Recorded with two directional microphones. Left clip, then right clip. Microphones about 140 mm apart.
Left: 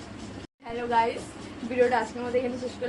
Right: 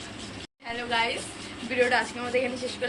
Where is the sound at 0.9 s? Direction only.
25° left (ahead or behind).